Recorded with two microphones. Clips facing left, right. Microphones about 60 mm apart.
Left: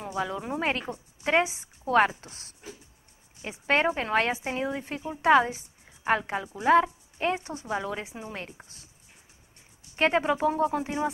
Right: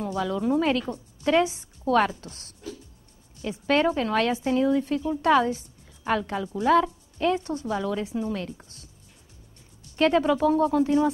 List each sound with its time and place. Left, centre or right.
0.0 s speech: left
9.8 s speech: left